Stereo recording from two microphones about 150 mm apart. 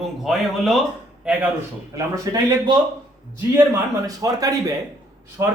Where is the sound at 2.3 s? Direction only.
25° right (ahead or behind).